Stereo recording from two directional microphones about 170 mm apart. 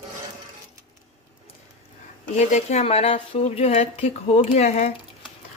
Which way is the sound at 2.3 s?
40° left (ahead or behind).